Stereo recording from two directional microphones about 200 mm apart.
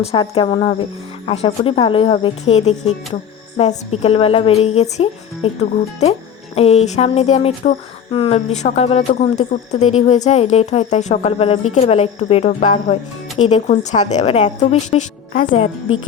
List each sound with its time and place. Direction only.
0.0 s speech: 30° left (ahead or behind)